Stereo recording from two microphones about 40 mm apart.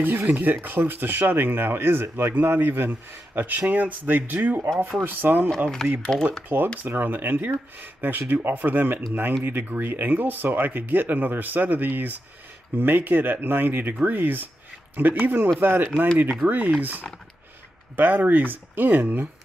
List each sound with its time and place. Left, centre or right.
0.2 s speech: right
2.3 s speech: right
5.8 s speech: centre
6.5 s speech: right
6.9 s speech: right
9.4 s speech: right
17.9 s speech: right